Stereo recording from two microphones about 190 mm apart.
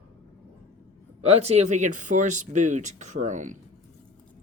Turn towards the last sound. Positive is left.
turn(degrees=-40)  # may be behind; listen again after turning